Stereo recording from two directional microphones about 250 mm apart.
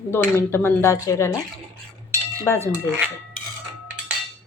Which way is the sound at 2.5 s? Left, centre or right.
Centre.